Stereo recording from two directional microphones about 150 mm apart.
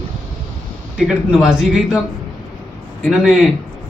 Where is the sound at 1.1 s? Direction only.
5° right (ahead or behind).